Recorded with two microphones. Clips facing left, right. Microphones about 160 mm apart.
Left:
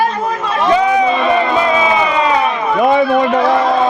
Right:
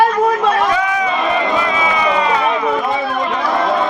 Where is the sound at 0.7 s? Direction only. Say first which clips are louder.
Left 6 dB; 25° left (ahead or behind).